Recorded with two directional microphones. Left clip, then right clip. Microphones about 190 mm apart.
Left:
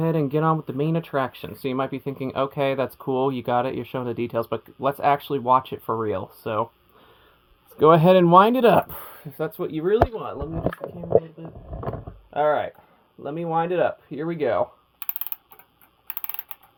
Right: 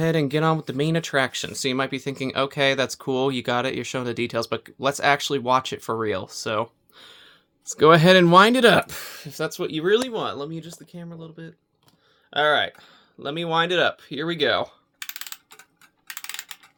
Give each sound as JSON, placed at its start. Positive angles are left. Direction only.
{"t": 0.0, "sound": "speech", "side_deg": -15}
{"t": 5.8, "sound": "speech", "side_deg": -45}
{"t": 6.3, "sound": "speech", "side_deg": -15}
{"t": 7.7, "sound": "speech", "side_deg": -15}
{"t": 12.4, "sound": "speech", "side_deg": -20}